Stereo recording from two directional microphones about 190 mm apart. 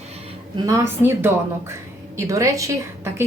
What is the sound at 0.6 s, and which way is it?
A woman's voice, 15° right (ahead or behind).